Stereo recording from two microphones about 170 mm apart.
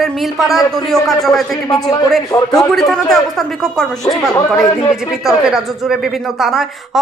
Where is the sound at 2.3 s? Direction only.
20° left (ahead or behind).